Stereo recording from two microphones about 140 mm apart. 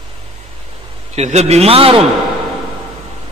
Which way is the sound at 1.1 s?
50° right (ahead or behind).